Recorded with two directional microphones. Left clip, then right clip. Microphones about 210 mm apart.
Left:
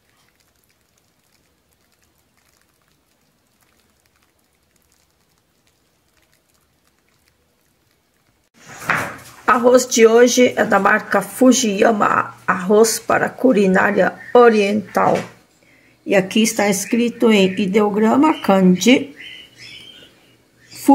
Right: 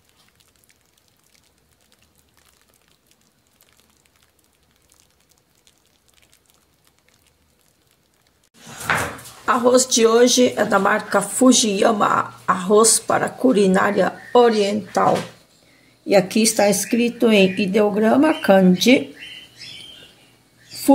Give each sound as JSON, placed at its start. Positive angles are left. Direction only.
{"t": 9.5, "sound": "speech", "side_deg": 15}
{"t": 16.1, "sound": "speech", "side_deg": 5}